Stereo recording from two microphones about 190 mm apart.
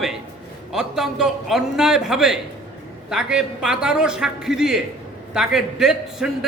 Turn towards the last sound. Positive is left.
turn(degrees=0)  # may be behind; listen again after turning